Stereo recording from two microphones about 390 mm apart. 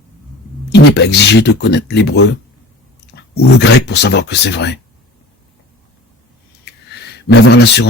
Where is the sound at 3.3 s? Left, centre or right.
Left.